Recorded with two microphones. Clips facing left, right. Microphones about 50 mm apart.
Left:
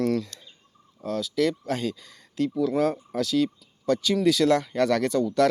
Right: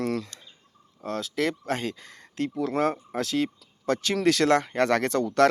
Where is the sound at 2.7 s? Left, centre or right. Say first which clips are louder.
Left 1 dB; right.